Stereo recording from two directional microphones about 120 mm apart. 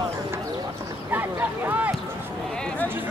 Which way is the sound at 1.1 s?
15° right (ahead or behind).